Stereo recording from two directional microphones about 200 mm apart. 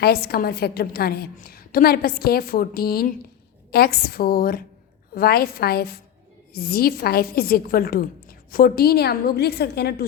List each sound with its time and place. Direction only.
0.0 s a woman's voice: 50° left (ahead or behind)